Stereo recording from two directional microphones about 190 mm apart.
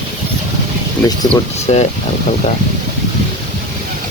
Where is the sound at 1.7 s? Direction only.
35° left (ahead or behind).